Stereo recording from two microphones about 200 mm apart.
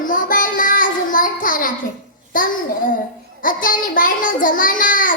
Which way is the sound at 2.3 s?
45° left (ahead or behind).